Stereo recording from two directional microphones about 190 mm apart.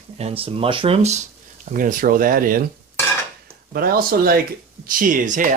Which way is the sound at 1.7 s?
45° right (ahead or behind).